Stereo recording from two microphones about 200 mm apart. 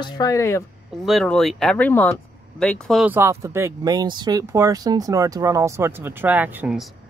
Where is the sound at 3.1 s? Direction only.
15° right (ahead or behind).